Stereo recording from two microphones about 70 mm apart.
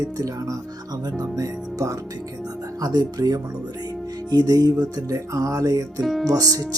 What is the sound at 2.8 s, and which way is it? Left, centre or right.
Music, right.